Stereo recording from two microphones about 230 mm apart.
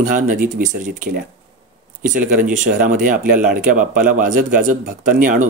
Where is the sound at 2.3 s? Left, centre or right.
Right.